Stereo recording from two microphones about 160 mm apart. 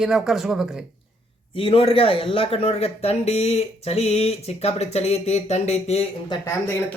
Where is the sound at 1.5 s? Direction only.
35° left (ahead or behind).